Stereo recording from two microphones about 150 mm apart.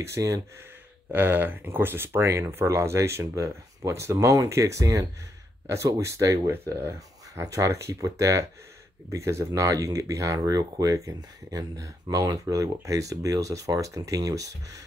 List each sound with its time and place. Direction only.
0.0 s speech: 20° right (ahead or behind)